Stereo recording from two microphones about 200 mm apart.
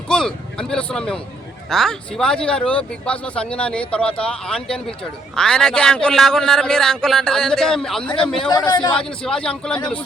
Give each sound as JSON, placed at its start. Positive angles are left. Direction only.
{"t": 0.1, "sound": "speech", "side_deg": 5}
{"t": 8.4, "sound": "a man's voice", "side_deg": 20}
{"t": 9.0, "sound": "speech", "side_deg": 5}